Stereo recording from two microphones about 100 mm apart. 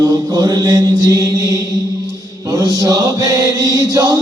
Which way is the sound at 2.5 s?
35° right (ahead or behind).